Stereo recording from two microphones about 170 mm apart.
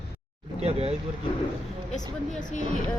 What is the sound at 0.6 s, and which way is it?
Speech, 35° right (ahead or behind).